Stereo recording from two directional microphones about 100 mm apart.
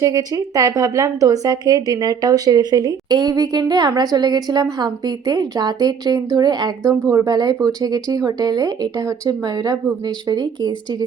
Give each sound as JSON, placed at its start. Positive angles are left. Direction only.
{"t": 0.0, "sound": "speech", "side_deg": -35}
{"t": 7.0, "sound": "speech", "side_deg": -30}